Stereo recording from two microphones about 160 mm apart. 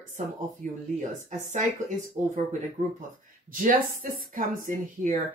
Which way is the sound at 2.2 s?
50° right (ahead or behind).